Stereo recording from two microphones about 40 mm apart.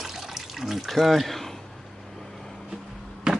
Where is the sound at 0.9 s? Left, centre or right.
Centre.